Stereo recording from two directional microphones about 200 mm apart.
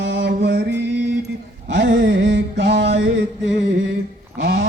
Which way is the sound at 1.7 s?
60° right (ahead or behind).